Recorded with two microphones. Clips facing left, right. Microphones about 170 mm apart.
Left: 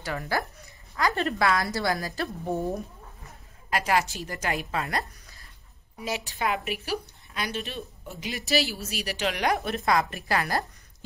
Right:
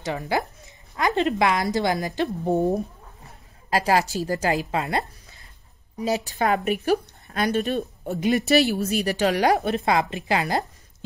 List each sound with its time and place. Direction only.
0.0 s a woman's voice: 20° right (ahead or behind)
3.7 s a woman's voice: 35° right (ahead or behind)
4.6 s a woman's voice: 20° right (ahead or behind)
5.9 s a woman's voice: 40° right (ahead or behind)
6.8 s a woman's voice: 55° right (ahead or behind); by 11.1 s 20° right (ahead or behind)